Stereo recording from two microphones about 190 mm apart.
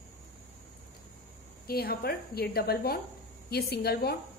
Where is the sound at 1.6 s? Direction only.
55° left (ahead or behind).